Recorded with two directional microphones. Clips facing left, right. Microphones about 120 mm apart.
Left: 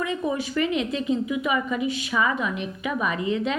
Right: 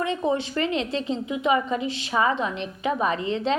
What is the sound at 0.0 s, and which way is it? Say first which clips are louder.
A woman's voice: right 2 dB; 30° right (ahead or behind).